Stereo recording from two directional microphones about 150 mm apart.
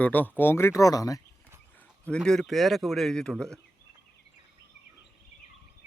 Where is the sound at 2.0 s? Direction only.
5° left (ahead or behind).